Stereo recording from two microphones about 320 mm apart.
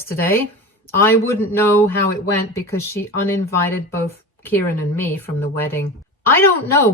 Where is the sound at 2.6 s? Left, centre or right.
Centre.